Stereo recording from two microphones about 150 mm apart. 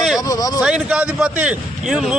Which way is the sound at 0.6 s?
5° right (ahead or behind).